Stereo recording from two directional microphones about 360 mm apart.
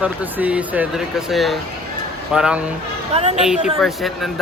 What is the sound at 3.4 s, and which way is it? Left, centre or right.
Speech, centre.